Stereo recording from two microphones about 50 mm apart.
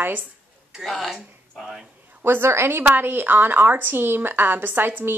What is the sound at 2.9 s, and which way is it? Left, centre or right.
A woman's voice, right.